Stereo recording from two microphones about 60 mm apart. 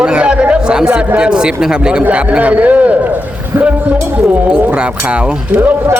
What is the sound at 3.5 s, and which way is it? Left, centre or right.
Speech, right.